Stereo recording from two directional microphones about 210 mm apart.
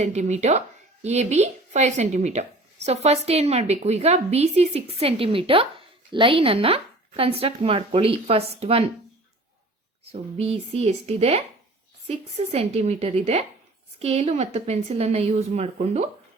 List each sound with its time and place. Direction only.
0.0 s speech: 35° right (ahead or behind)
10.1 s speech: 30° right (ahead or behind)